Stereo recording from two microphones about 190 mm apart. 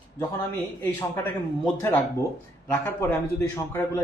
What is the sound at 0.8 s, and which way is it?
A man's voice, 15° left (ahead or behind).